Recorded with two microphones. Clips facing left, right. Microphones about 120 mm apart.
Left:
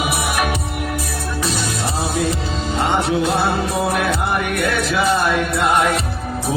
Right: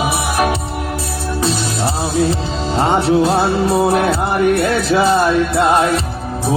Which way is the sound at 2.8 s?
35° right (ahead or behind).